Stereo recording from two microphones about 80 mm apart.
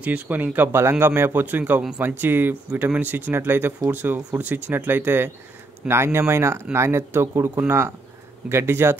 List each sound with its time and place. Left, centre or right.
0.0 s a man's voice: centre